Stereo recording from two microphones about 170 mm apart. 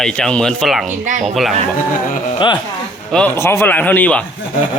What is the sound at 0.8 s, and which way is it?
Speech, 45° right (ahead or behind).